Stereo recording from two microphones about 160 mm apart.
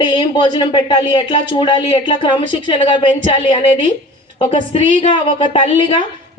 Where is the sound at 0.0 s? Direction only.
30° left (ahead or behind).